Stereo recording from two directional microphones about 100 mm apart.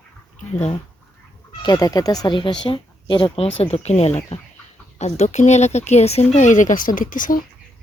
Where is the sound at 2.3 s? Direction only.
55° left (ahead or behind).